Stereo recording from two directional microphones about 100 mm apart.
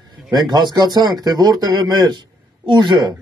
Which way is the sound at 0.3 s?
45° right (ahead or behind).